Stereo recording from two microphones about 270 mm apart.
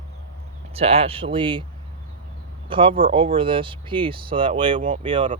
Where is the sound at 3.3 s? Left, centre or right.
Centre.